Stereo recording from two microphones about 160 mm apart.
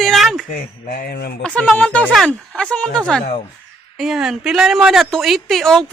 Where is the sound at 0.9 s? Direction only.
70° left (ahead or behind).